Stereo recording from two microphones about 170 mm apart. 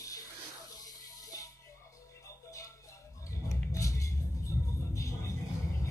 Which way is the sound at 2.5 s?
20° left (ahead or behind).